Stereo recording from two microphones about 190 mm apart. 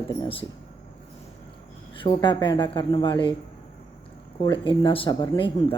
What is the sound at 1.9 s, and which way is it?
Speech, 25° left (ahead or behind).